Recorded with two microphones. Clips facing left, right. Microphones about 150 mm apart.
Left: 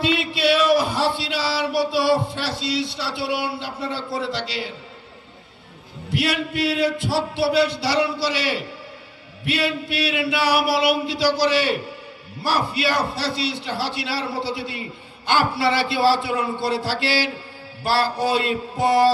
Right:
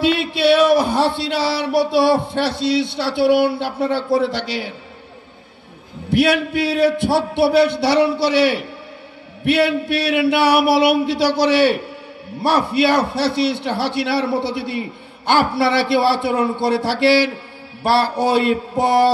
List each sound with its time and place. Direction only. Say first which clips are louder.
0.0 s speech: right 5 dB; 60° right (ahead or behind)
6.2 s a man's voice: right 1 dB; 60° right (ahead or behind)